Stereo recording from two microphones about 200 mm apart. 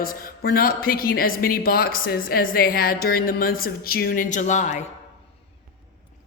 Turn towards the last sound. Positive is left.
turn(degrees=35)  # may be behind; listen again after turning